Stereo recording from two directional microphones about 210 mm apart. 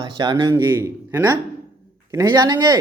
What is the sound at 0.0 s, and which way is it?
A man's voice, 20° right (ahead or behind).